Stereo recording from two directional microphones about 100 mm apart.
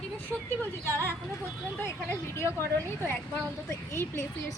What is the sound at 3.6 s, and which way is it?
Speech, 25° left (ahead or behind).